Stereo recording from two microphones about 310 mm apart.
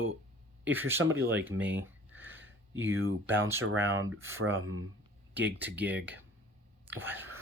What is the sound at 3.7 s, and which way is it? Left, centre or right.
Speech, centre.